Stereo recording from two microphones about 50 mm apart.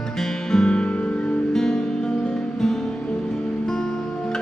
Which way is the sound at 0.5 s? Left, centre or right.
Centre.